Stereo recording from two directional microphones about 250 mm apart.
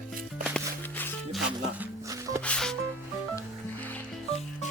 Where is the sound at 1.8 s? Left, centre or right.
Centre.